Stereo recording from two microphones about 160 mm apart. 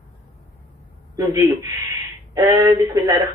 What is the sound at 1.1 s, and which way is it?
Speech, 20° right (ahead or behind).